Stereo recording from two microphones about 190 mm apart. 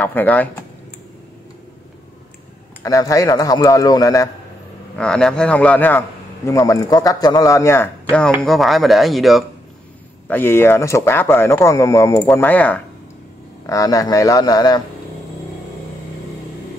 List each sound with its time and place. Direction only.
0.0 s speech: 10° left (ahead or behind)
2.8 s a man's voice: 15° left (ahead or behind)
4.9 s a man's voice: 5° left (ahead or behind)
10.2 s a man's voice: 10° left (ahead or behind)
13.7 s a man's voice: 20° left (ahead or behind)